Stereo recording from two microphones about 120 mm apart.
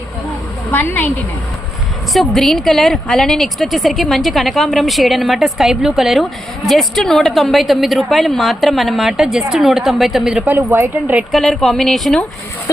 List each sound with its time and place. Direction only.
0.7 s a woman's voice: 15° left (ahead or behind)
2.1 s a woman's voice: centre (ahead or behind)
10.4 s speech: 20° right (ahead or behind)
11.3 s a woman's voice: centre (ahead or behind)